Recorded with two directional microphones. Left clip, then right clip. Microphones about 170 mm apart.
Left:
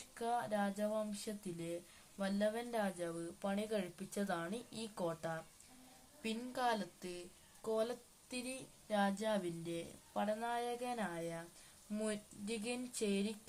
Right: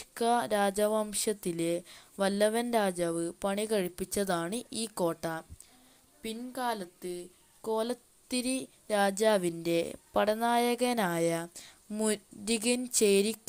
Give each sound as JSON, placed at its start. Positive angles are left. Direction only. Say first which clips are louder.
{"t": 0.1, "sound": "speech", "louder": "right 11 dB", "side_deg": -40}